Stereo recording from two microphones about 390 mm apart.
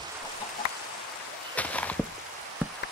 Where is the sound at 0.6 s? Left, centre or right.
Left.